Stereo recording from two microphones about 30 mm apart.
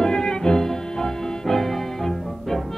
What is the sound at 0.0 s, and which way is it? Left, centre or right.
Music, left.